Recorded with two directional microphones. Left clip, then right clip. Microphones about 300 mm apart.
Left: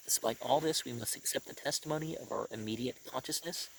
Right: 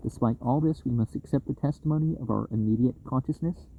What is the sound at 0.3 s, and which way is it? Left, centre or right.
Speech, left.